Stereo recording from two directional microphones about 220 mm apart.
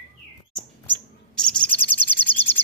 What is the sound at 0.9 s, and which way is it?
Bird, 5° left (ahead or behind).